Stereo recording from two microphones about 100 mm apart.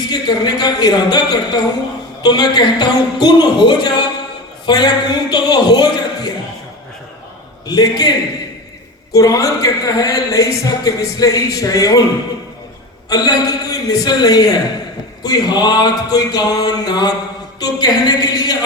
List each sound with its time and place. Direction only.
0.1 s speech: 45° left (ahead or behind)
7.7 s speech: 40° left (ahead or behind)
9.1 s speech: 35° left (ahead or behind)
13.1 s speech: 40° left (ahead or behind)